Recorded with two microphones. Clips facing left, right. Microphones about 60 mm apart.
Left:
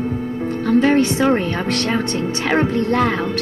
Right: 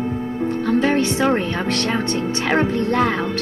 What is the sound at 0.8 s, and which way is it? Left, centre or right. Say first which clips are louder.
Music: left 5 dB; left.